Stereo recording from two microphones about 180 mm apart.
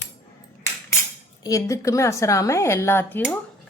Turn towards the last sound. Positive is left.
turn(degrees=10)  # may be behind; listen again after turning